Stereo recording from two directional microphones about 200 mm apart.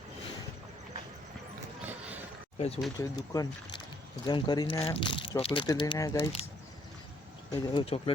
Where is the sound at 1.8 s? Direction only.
10° right (ahead or behind).